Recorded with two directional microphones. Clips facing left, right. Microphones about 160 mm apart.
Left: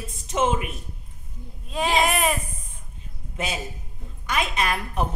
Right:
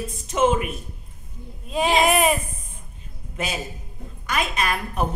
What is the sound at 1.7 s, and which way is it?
Speech, 15° right (ahead or behind).